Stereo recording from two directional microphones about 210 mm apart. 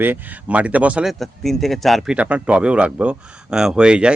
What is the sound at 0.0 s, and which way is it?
A man's voice, 10° right (ahead or behind).